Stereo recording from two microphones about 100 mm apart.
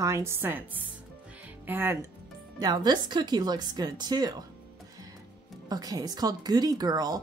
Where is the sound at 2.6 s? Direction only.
45° right (ahead or behind).